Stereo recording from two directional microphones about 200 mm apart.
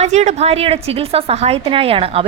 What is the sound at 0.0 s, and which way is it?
A woman's voice, 35° right (ahead or behind).